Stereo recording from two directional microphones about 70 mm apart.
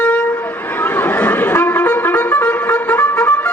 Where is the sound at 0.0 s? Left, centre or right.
Centre.